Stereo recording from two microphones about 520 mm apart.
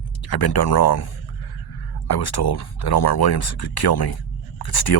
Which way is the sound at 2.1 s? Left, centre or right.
Left.